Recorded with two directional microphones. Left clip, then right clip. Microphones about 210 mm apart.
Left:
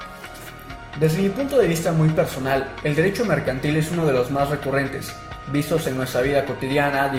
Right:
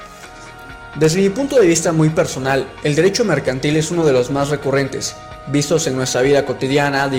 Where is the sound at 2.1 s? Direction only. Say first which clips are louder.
Right 4 dB; 45° right (ahead or behind).